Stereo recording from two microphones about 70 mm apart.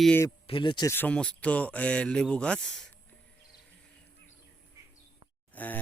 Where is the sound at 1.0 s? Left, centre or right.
Centre.